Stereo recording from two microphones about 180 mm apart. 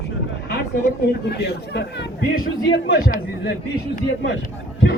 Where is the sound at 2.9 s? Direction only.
55° left (ahead or behind).